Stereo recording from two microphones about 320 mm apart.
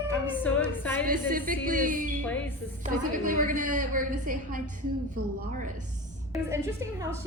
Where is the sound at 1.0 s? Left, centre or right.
Right.